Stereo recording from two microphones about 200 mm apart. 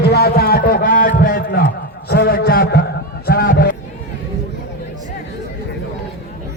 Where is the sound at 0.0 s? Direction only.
50° left (ahead or behind).